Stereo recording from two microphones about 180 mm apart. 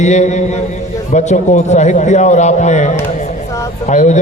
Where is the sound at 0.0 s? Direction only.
40° left (ahead or behind).